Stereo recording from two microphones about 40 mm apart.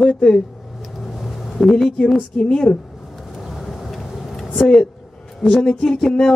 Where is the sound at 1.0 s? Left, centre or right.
Centre.